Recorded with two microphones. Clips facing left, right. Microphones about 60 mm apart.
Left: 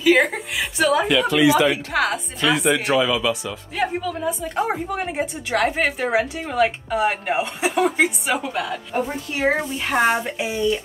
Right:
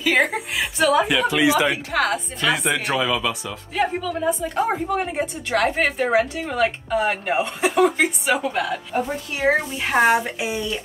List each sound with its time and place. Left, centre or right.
0.0 s a woman's voice: centre
1.3 s speech: centre
1.7 s a woman's voice: centre
8.5 s a woman's voice: right
9.4 s a woman's voice: centre